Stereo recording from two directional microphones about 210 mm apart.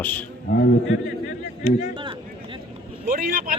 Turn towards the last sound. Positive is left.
turn(degrees=-45)  # may be behind; listen again after turning